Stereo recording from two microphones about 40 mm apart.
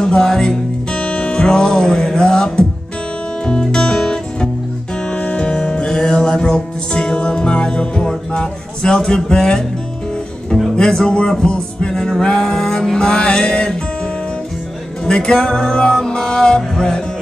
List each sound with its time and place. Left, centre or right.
0.0 s music: centre
0.9 s music: left; by 9.7 s centre
10.8 s speech: centre
11.1 s music: left
15.0 s music: centre